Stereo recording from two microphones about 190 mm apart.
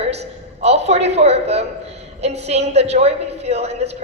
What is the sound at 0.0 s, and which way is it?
A woman's voice, 35° right (ahead or behind).